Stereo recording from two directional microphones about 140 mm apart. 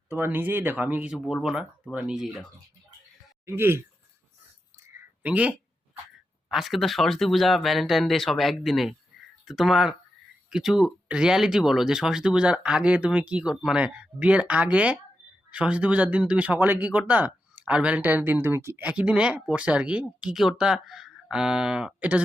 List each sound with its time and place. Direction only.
0.1 s speech: 15° right (ahead or behind)
3.4 s speech: 15° right (ahead or behind)
4.8 s a sound: 15° right (ahead or behind)
6.5 s speech: centre (ahead or behind)